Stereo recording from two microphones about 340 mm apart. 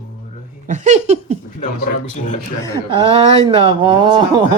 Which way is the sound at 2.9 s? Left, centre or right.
Centre.